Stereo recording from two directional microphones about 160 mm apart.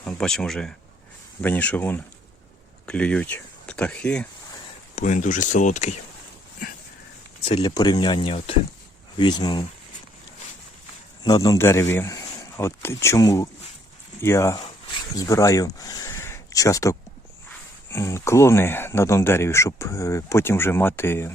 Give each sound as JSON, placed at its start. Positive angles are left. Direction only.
{"t": 0.1, "sound": "speech", "side_deg": 5}
{"t": 4.9, "sound": "speech", "side_deg": 50}
{"t": 7.4, "sound": "speech", "side_deg": 35}
{"t": 11.2, "sound": "speech", "side_deg": 20}